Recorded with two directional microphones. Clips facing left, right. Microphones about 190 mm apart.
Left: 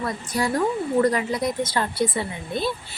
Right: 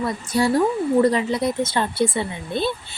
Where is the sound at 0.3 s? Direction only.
25° right (ahead or behind).